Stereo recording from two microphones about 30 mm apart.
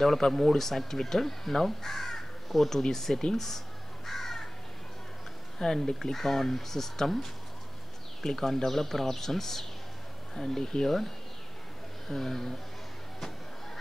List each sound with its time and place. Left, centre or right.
0.0 s speech: centre
3.3 s crow: centre
5.6 s speech: centre
8.6 s speech: centre